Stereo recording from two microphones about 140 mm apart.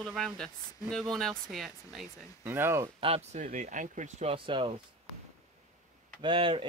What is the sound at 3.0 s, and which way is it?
Speech, 50° right (ahead or behind).